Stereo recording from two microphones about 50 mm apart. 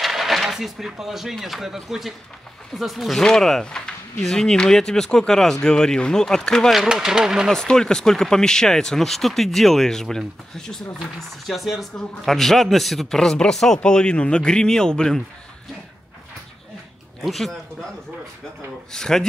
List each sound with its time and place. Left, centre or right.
0.0 s speech: centre
3.2 s speech: centre
6.7 s speech: centre
7.5 s speech: centre
11.5 s speech: centre
17.2 s speech: centre
18.9 s speech: centre